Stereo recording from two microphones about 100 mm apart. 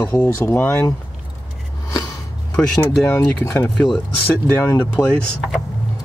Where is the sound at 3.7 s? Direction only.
5° left (ahead or behind).